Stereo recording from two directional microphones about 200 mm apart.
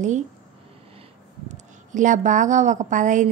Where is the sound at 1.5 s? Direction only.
40° right (ahead or behind).